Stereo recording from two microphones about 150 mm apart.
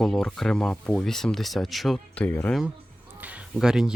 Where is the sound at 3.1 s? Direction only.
10° right (ahead or behind).